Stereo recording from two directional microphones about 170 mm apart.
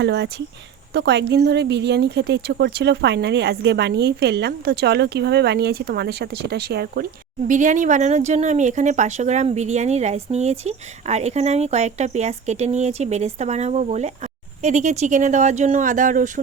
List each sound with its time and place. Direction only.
0.0 s a woman's voice: 90° right; by 7.0 s 70° right (ahead or behind)
7.4 s speech: 50° right (ahead or behind)